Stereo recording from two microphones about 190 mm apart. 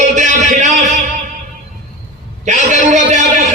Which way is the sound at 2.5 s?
40° right (ahead or behind).